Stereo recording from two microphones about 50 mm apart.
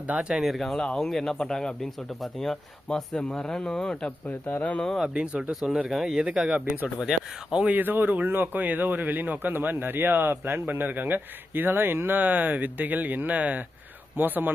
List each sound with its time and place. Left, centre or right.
0.1 s speech: centre
0.4 s speech: centre
4.3 s speech: left
5.0 s speech: centre
7.7 s a man's voice: right